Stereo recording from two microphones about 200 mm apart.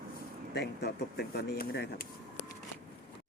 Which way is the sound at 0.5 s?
55° left (ahead or behind).